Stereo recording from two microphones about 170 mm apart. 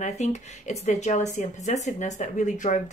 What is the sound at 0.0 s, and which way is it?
Speech, 45° left (ahead or behind).